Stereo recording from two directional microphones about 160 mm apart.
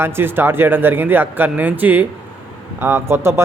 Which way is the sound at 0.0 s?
15° right (ahead or behind).